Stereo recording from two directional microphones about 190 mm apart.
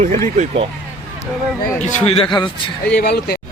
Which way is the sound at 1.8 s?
35° left (ahead or behind).